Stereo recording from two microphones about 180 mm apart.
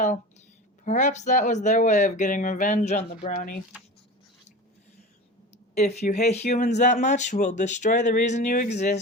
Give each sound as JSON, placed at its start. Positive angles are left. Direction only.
{"t": 0.9, "sound": "speech", "side_deg": 40}
{"t": 5.7, "sound": "speech", "side_deg": 40}